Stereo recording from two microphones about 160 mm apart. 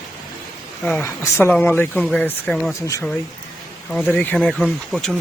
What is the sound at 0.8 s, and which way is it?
Speech, 15° left (ahead or behind).